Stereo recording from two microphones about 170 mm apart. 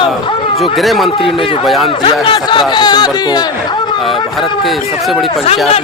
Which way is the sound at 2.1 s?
30° left (ahead or behind).